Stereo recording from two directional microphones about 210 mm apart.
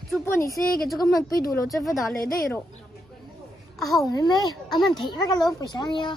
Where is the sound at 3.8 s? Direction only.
Centre (ahead or behind).